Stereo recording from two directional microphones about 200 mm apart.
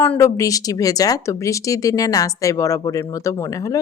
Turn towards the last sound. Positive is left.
turn(degrees=15)  # may be behind; listen again after turning